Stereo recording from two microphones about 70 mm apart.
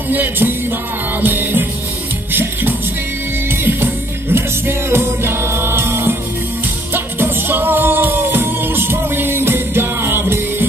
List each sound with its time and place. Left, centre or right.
0.1 s music: right
3.6 s music: right